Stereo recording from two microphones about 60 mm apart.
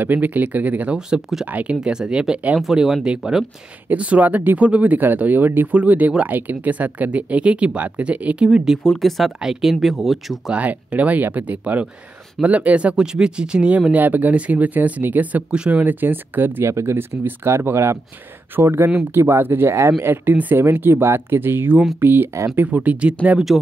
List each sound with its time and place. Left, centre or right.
0.0 s speech: right
0.9 s speech: centre
1.4 s speech: right
1.8 s speech: centre
2.6 s speech: centre
3.9 s speech: right
8.5 s speech: centre
10.5 s speech: right
15.5 s speech: centre
15.8 s speech: right
16.6 s speech: right
22.8 s speech: centre
23.5 s speech: centre